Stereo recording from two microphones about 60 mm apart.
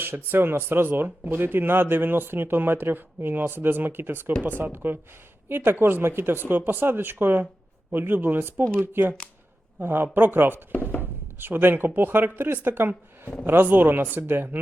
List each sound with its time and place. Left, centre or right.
0.0 s speech: right
11.0 s a sound: right
11.9 s speech: right